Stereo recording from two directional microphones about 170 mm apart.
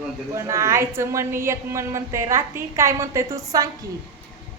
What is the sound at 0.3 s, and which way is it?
A woman's voice, 15° right (ahead or behind).